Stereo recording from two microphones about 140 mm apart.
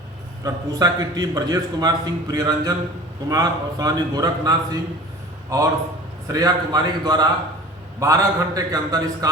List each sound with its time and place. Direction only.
0.4 s a man's voice: 25° right (ahead or behind)